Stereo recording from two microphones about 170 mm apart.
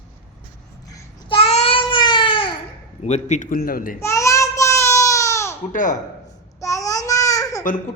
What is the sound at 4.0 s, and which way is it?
Child singing, 15° left (ahead or behind).